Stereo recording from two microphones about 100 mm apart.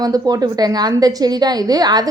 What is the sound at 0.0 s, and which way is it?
A woman's voice, 40° right (ahead or behind).